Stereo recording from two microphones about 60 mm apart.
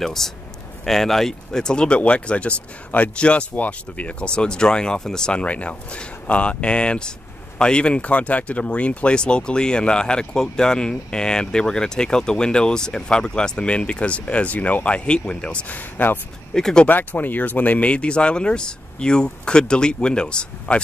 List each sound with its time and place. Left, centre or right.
0.0 s a man's voice: centre
15.7 s speech: left
16.5 s speech: centre
16.8 s speech: left